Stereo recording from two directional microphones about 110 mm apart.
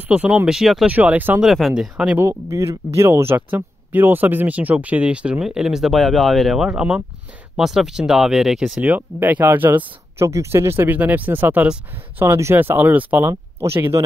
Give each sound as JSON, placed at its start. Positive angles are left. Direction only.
{"t": 0.1, "sound": "speech", "side_deg": -10}
{"t": 0.8, "sound": "speech", "side_deg": -15}
{"t": 1.4, "sound": "speech", "side_deg": 0}
{"t": 2.5, "sound": "speech", "side_deg": -30}
{"t": 12.3, "sound": "speech", "side_deg": -25}